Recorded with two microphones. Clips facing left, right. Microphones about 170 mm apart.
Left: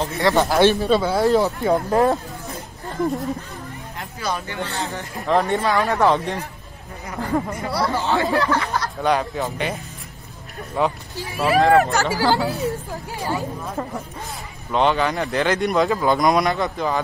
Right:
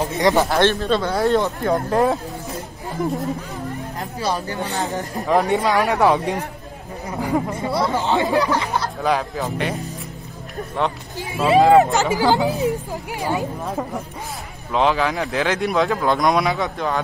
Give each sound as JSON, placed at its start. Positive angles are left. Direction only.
{"t": 0.1, "sound": "speech", "side_deg": -15}
{"t": 0.6, "sound": "speech", "side_deg": 10}
{"t": 4.2, "sound": "speech", "side_deg": -30}
{"t": 4.6, "sound": "speech", "side_deg": -15}
{"t": 9.0, "sound": "speech", "side_deg": 0}
{"t": 10.8, "sound": "speech", "side_deg": 5}
{"t": 11.1, "sound": "speech", "side_deg": -20}
{"t": 14.7, "sound": "speech", "side_deg": 0}